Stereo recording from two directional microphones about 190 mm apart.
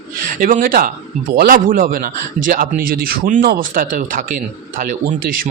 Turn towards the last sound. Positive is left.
turn(degrees=-50)  # may be behind; listen again after turning